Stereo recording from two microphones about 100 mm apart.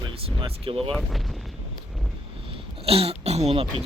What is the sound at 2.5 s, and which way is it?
Speech, 70° right (ahead or behind).